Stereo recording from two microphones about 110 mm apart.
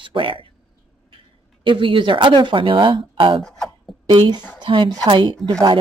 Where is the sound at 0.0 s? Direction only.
50° right (ahead or behind).